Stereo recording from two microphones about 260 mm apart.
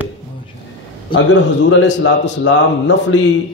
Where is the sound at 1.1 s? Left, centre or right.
Left.